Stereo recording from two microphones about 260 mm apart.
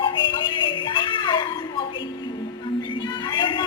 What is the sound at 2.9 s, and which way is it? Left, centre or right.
Music, centre.